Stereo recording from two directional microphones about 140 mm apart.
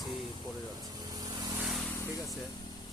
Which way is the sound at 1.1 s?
30° right (ahead or behind).